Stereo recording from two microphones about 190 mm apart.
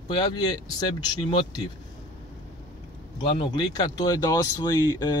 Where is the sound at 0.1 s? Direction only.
20° left (ahead or behind).